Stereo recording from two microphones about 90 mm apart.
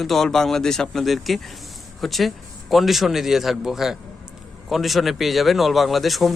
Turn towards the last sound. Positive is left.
turn(degrees=0)  # may be behind; listen again after turning